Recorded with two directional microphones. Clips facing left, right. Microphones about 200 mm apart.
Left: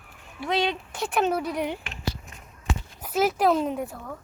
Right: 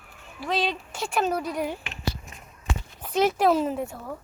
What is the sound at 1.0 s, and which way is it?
Speech, centre (ahead or behind).